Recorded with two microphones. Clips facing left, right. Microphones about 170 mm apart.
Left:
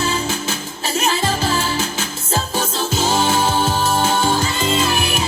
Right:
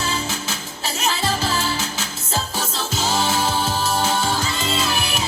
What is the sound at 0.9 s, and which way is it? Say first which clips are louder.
Music: left 4 dB; 55° left (ahead or behind).